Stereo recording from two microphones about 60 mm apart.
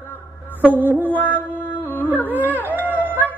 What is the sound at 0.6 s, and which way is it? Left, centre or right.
Music, left.